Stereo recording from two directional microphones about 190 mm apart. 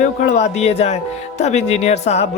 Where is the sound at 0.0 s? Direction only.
35° left (ahead or behind).